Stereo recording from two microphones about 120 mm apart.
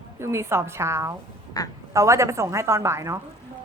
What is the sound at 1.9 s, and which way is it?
A woman's voice, 25° right (ahead or behind).